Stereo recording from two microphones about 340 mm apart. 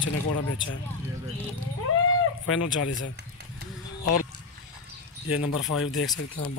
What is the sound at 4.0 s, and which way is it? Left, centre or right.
Speech, left.